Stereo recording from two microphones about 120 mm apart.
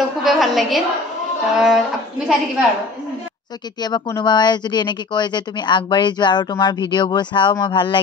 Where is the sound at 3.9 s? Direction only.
40° left (ahead or behind).